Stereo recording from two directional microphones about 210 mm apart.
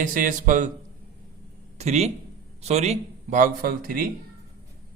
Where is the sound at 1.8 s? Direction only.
30° right (ahead or behind).